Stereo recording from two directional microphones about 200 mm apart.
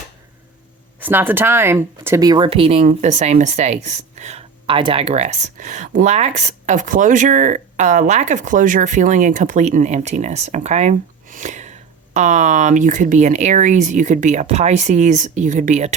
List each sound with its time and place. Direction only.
0.9 s speech: 10° right (ahead or behind); by 16.0 s 35° right (ahead or behind)